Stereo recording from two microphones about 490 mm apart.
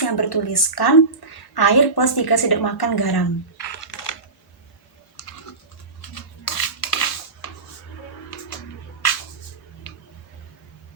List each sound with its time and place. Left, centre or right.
0.0 s a woman's voice: left
6.4 s cutlery: left